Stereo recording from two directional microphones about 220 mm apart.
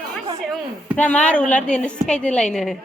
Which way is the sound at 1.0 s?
5° left (ahead or behind).